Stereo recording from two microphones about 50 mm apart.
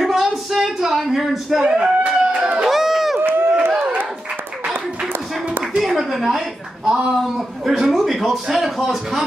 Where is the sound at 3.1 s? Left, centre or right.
Right.